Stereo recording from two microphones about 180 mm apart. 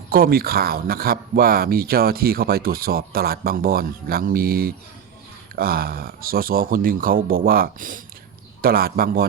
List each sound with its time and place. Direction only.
0.1 s speech: 55° right (ahead or behind)